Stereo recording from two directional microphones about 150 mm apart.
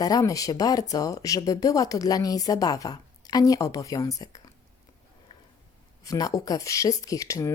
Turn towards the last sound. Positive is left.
turn(degrees=20)  # may be behind; listen again after turning